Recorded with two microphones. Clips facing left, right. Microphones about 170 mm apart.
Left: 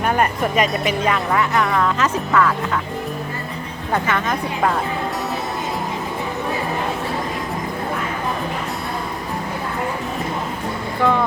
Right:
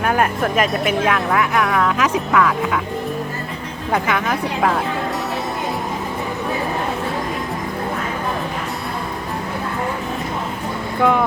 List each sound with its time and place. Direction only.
0.0 s speech: centre (ahead or behind)
3.9 s a woman's voice: 10° right (ahead or behind)
11.0 s a woman's voice: 15° right (ahead or behind)